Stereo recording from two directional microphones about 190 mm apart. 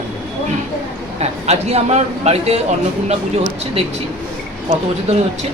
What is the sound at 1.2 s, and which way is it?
A man's voice, 35° right (ahead or behind).